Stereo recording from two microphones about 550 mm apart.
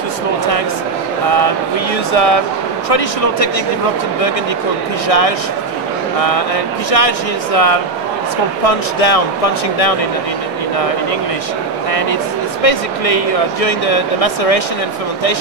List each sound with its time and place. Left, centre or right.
2.1 s speech: left
2.9 s speech: left
5.0 s speech: left
12.6 s speech: left